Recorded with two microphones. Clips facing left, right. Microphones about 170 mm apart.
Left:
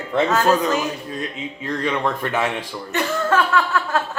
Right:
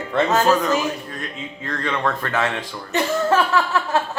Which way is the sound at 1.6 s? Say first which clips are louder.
Left 1 dB; 15° left (ahead or behind).